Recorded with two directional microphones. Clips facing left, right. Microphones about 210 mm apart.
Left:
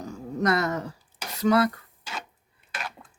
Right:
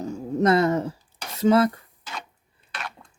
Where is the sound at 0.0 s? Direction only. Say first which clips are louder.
Right 5 dB; 25° right (ahead or behind).